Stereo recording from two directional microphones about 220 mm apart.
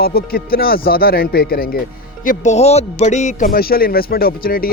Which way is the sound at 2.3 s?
30° left (ahead or behind).